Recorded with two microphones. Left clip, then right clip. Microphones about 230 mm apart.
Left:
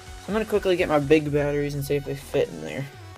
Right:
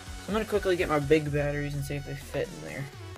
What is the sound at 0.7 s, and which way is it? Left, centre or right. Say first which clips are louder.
Speech: left 5 dB; centre.